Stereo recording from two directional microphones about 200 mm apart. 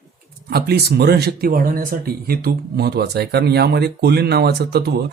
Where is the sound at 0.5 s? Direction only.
55° right (ahead or behind).